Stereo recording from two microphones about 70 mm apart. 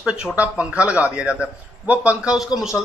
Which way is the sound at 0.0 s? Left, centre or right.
Centre.